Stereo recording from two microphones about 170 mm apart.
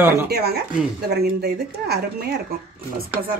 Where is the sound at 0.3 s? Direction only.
70° right (ahead or behind).